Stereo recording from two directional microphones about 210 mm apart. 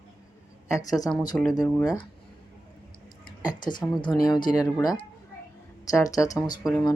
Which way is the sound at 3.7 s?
20° left (ahead or behind).